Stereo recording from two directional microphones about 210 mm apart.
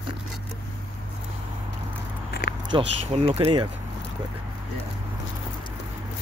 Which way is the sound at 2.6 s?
25° right (ahead or behind).